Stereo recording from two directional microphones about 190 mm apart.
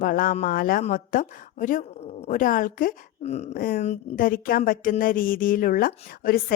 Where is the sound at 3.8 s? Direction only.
35° left (ahead or behind).